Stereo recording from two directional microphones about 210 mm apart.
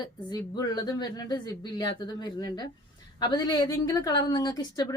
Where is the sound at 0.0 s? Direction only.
20° left (ahead or behind).